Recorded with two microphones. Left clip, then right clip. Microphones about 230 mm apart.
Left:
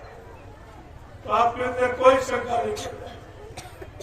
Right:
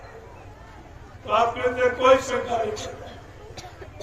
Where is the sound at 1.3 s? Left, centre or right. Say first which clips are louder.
Even; left.